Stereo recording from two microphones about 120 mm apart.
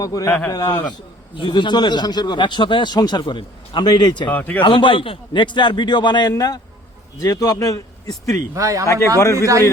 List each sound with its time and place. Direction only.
0.0 s speech: 30° left (ahead or behind)
0.3 s speech: 15° left (ahead or behind)
1.4 s speech: 40° left (ahead or behind)
4.3 s speech: 15° left (ahead or behind)
4.6 s speech: 45° left (ahead or behind); by 8.4 s 30° left (ahead or behind)
8.5 s speech: 25° right (ahead or behind)
8.9 s speech: 25° left (ahead or behind)